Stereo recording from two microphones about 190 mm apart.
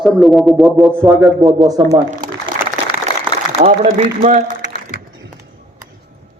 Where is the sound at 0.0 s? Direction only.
Centre (ahead or behind); by 2.0 s 20° right (ahead or behind).